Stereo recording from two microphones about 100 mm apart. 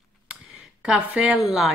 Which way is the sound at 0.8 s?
10° right (ahead or behind).